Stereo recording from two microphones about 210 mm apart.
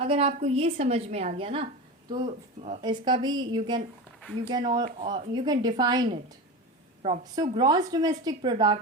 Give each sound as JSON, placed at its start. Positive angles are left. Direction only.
{"t": 0.0, "sound": "a woman's voice", "side_deg": -30}
{"t": 2.8, "sound": "a woman's voice", "side_deg": -20}